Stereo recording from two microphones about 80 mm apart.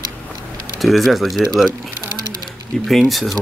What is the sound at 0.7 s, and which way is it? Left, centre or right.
Speech, centre.